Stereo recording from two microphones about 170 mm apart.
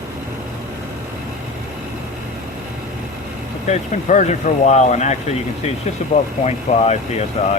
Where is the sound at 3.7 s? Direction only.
45° left (ahead or behind).